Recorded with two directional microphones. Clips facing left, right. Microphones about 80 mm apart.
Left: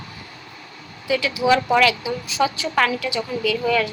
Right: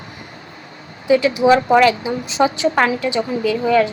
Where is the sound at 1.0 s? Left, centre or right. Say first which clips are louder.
Right 7 dB; right.